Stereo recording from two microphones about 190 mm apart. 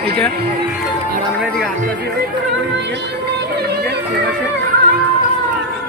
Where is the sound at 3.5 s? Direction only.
60° right (ahead or behind).